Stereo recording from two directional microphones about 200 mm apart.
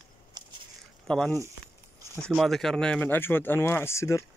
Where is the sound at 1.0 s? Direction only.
Centre (ahead or behind).